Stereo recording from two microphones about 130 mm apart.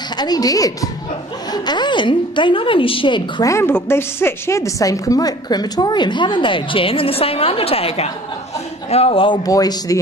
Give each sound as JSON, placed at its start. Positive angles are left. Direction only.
{"t": 0.2, "sound": "a woman's voice", "side_deg": 30}
{"t": 3.4, "sound": "a woman's voice", "side_deg": 20}
{"t": 9.5, "sound": "speech", "side_deg": 30}